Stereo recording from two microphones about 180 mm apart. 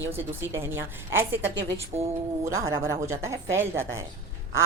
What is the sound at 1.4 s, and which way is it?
Speech, 80° right.